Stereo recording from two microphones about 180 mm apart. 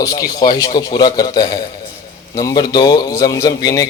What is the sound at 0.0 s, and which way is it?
A man's voice, 20° left (ahead or behind).